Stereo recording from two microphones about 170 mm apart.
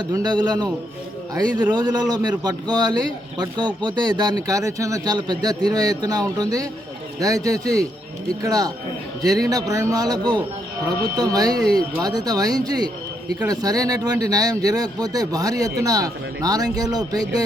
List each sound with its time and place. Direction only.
0.1 s speech: 25° right (ahead or behind)